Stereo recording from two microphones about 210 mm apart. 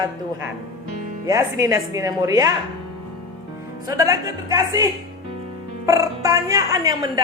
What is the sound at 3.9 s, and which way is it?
Speech, 15° right (ahead or behind).